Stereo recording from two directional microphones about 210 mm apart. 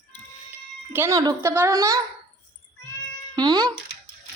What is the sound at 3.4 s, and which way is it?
Speech, 20° right (ahead or behind).